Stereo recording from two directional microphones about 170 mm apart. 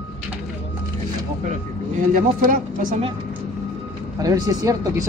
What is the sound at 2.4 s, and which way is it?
Speech, 55° right (ahead or behind).